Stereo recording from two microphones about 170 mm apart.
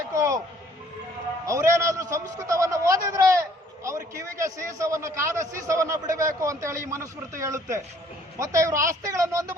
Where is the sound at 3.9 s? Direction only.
15° right (ahead or behind).